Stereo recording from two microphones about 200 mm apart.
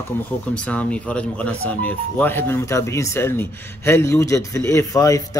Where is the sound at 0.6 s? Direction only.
5° left (ahead or behind).